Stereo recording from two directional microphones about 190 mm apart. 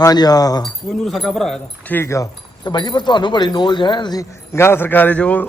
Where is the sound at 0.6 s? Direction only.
Centre (ahead or behind).